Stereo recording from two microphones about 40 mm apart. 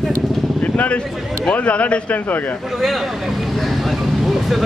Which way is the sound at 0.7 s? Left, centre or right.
Left.